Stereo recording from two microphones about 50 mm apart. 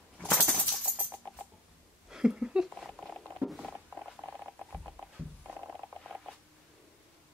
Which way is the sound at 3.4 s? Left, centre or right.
Right.